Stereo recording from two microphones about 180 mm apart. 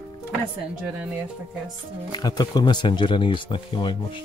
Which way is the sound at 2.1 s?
25° left (ahead or behind).